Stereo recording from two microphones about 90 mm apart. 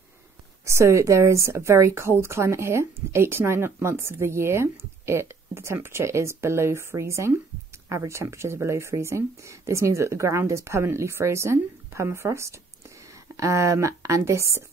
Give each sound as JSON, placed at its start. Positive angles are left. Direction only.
{"t": 0.7, "sound": "a woman's voice", "side_deg": -30}